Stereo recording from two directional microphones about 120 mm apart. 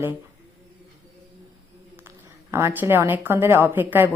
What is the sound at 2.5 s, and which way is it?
A woman's voice, 20° right (ahead or behind).